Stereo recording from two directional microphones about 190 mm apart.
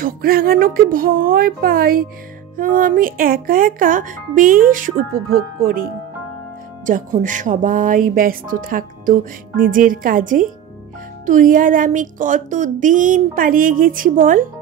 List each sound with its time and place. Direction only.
0.0 s speech: 50° right (ahead or behind)
6.9 s speech: 45° right (ahead or behind)